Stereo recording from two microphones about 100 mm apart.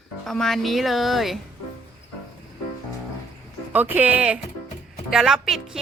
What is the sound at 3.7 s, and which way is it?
Speech, 15° right (ahead or behind).